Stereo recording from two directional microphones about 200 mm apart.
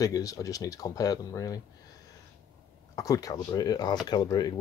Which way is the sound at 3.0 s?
20° left (ahead or behind).